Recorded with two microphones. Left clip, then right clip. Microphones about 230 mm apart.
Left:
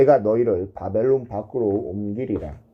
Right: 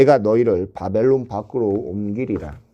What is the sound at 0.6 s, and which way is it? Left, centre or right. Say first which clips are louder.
Speech: right 3 dB; right.